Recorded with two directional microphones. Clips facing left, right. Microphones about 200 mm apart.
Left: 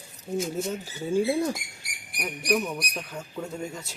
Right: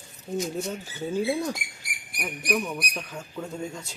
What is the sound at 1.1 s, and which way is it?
Speech, 5° left (ahead or behind).